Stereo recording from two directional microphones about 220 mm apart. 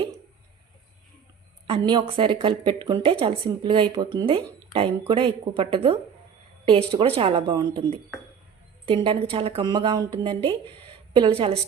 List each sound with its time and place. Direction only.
1.6 s speech: 25° right (ahead or behind)